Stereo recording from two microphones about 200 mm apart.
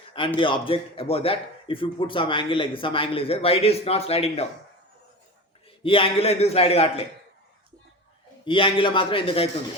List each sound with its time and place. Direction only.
0.3 s a man's voice: 25° left (ahead or behind)
5.8 s a man's voice: 25° left (ahead or behind)
8.4 s a man's voice: 25° left (ahead or behind)